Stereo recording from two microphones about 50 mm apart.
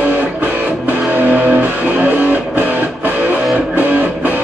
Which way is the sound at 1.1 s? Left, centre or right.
Right.